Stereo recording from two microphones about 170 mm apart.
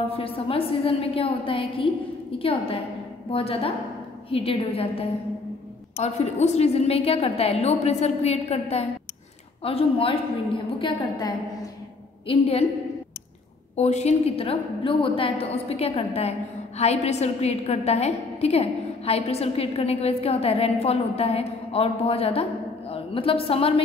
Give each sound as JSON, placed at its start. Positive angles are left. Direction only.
{"t": 0.1, "sound": "a woman's voice", "side_deg": 35}
{"t": 13.7, "sound": "a woman's voice", "side_deg": 40}